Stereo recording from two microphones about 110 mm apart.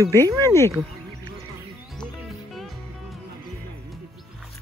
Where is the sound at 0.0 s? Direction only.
30° right (ahead or behind).